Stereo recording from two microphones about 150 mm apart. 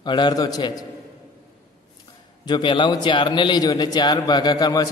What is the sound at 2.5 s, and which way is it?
A man's voice, 30° left (ahead or behind).